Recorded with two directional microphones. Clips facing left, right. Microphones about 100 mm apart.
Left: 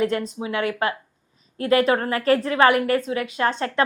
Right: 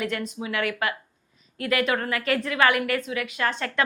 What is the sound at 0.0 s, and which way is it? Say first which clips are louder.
A woman's voice: left 6 dB; 30° left (ahead or behind).